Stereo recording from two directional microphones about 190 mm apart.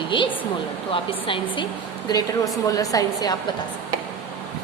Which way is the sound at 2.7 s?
20° left (ahead or behind).